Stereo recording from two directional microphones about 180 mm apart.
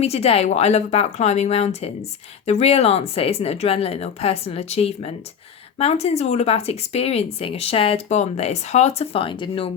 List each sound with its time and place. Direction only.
0.0 s speech: 35° left (ahead or behind)